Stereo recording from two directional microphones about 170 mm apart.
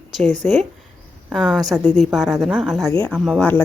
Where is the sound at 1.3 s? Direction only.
Centre (ahead or behind).